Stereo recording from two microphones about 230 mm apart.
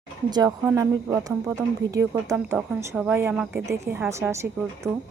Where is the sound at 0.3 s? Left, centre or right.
Centre.